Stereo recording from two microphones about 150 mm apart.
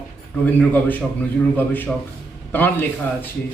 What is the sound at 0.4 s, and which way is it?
A man's voice, 10° left (ahead or behind).